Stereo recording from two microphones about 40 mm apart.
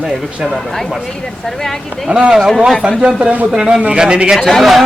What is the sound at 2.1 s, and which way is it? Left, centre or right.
A man's voice, right.